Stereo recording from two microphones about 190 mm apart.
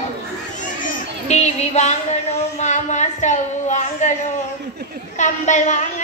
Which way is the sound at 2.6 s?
40° left (ahead or behind).